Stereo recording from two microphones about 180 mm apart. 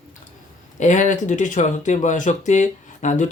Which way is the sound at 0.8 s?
40° left (ahead or behind).